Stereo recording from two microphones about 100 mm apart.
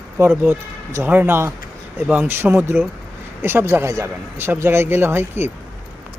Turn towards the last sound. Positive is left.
turn(degrees=-25)  # may be behind; listen again after turning